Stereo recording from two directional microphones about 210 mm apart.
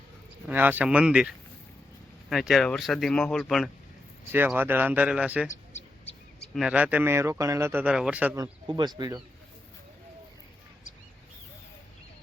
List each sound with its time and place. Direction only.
0.4 s speech: 10° right (ahead or behind)
2.3 s speech: centre (ahead or behind)
4.3 s speech: 10° right (ahead or behind)
8.6 s speech: 20° right (ahead or behind)